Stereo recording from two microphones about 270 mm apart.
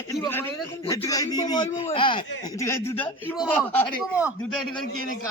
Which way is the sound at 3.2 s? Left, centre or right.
Centre.